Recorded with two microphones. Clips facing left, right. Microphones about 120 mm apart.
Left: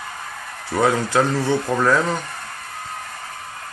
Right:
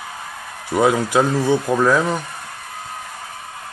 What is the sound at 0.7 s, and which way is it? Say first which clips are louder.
Speech: right 2 dB; 10° right (ahead or behind).